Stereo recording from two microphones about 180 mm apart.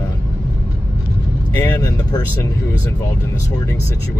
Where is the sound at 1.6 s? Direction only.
15° left (ahead or behind).